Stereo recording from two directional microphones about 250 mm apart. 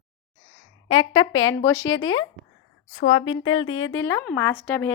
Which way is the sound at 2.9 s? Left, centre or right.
Left.